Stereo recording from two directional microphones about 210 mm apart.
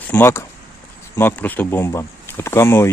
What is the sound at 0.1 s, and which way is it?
Speech, 10° left (ahead or behind).